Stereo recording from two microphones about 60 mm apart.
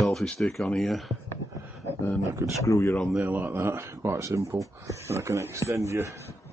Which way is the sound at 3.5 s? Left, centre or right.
Right.